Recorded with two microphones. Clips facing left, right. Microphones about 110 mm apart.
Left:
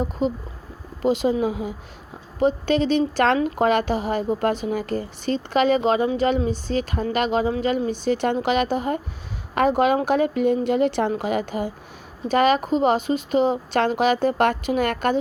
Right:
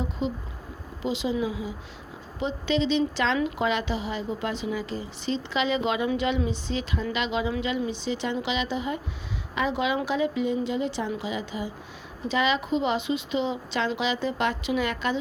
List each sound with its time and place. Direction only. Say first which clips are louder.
0.0 s speech: left 6 dB; 45° left (ahead or behind)